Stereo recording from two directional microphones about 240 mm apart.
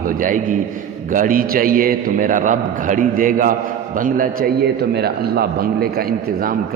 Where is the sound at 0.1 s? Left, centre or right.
Right.